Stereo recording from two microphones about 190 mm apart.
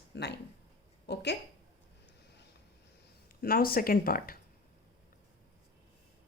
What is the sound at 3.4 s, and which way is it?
Speech, 50° left (ahead or behind).